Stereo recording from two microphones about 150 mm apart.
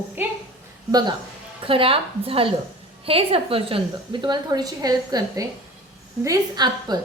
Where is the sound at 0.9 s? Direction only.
25° right (ahead or behind).